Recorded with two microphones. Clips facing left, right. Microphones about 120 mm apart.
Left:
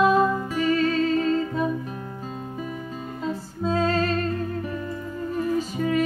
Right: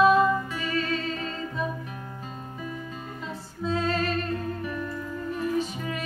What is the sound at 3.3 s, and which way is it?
Music, 40° left (ahead or behind).